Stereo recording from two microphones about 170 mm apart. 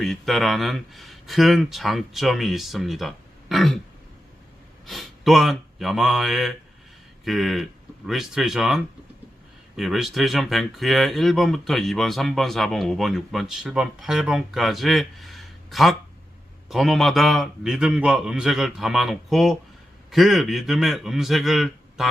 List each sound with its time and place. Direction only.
0.0 s speech: centre (ahead or behind)
4.9 s speech: centre (ahead or behind)